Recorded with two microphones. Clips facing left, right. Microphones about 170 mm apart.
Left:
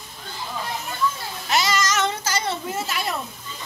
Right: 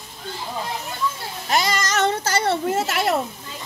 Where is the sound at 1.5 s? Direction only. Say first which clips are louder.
Right 1 dB; 50° right (ahead or behind); by 3.1 s 75° right (ahead or behind).